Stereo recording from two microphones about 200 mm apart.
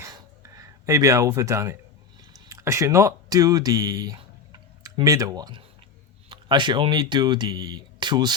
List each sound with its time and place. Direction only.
0.5 s speech: 15° right (ahead or behind)